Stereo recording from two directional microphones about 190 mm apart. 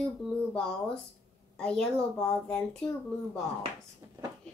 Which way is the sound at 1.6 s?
5° left (ahead or behind).